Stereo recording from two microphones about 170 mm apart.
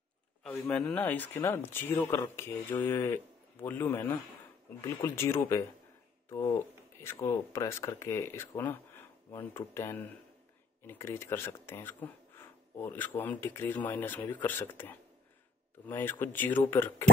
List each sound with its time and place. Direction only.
0.4 s speech: 5° left (ahead or behind)